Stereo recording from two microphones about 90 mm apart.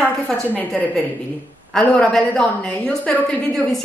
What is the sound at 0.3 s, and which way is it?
A woman's voice, 20° left (ahead or behind).